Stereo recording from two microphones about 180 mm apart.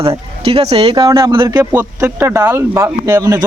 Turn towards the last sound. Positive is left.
turn(degrees=-20)  # may be behind; listen again after turning